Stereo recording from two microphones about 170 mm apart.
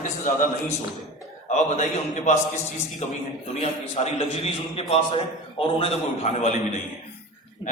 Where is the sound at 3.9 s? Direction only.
35° left (ahead or behind).